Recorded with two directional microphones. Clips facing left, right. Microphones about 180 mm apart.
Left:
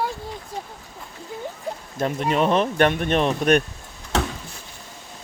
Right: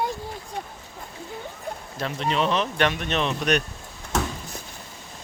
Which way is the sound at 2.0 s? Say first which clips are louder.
Left 4 dB; 50° left (ahead or behind).